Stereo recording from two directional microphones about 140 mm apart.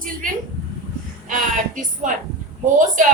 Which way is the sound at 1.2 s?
70° right (ahead or behind).